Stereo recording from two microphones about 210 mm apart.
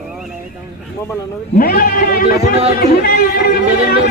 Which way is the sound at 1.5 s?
45° left (ahead or behind).